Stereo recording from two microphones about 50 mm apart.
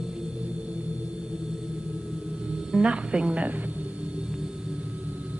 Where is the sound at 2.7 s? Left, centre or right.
Right.